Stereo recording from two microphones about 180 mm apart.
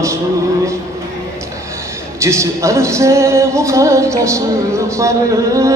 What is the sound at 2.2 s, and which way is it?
Music, 15° right (ahead or behind).